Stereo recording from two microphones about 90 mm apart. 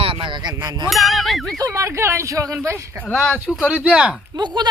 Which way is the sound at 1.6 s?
35° right (ahead or behind).